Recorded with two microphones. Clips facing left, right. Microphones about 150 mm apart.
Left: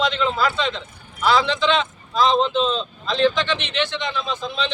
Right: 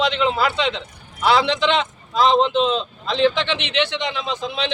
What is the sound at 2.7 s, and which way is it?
A man's voice, 65° right (ahead or behind).